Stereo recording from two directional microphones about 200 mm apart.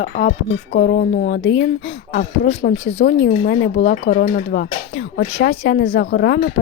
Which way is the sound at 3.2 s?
45° left (ahead or behind).